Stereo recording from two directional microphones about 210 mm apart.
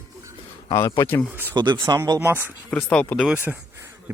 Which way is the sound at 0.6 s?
15° left (ahead or behind).